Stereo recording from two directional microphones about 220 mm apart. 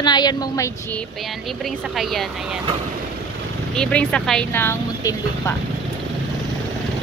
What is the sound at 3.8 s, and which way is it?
Speech, 5° left (ahead or behind).